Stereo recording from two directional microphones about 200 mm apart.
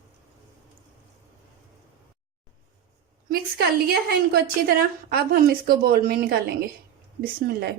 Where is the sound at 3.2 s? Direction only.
50° right (ahead or behind).